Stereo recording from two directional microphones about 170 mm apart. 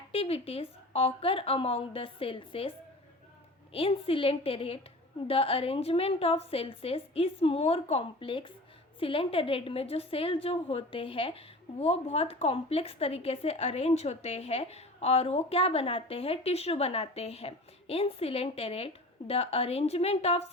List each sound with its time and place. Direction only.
0.1 s a woman's voice: 35° left (ahead or behind)